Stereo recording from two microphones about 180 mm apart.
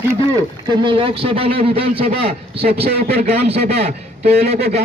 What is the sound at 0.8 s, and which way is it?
A man's voice, 30° right (ahead or behind).